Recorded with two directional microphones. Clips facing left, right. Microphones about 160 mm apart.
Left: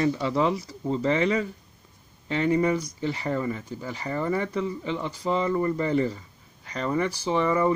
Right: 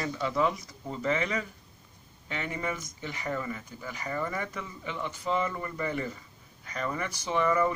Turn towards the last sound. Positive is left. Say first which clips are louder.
# left 3 dB
turn(degrees=25)  # may be behind; listen again after turning